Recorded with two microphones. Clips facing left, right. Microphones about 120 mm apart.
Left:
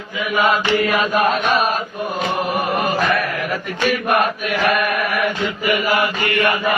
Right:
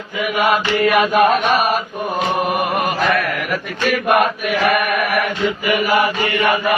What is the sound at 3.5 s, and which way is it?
Mantra, 85° right.